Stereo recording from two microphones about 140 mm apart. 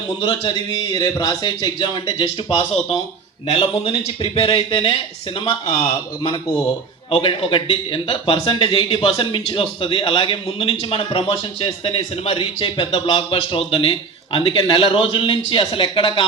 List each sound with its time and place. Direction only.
0.2 s a man's voice: 35° left (ahead or behind)
3.5 s speech: 45° left (ahead or behind)
7.1 s a man's voice: 35° left (ahead or behind)